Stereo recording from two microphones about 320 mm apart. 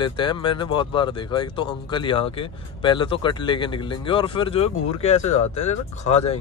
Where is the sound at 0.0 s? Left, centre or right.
Centre.